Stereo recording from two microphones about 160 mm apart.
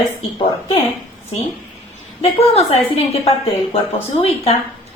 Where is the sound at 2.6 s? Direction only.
40° left (ahead or behind).